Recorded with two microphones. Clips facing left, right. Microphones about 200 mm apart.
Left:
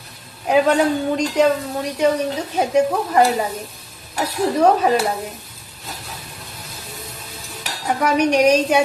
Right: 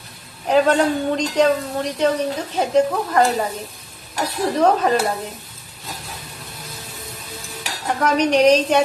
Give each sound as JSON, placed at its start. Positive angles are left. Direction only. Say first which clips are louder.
{"t": 0.4, "sound": "speech", "louder": "even", "side_deg": 10}
{"t": 7.9, "sound": "speech", "louder": "even", "side_deg": 10}